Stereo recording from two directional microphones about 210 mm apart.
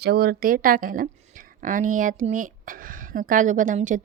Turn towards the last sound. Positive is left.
turn(degrees=-35)  # may be behind; listen again after turning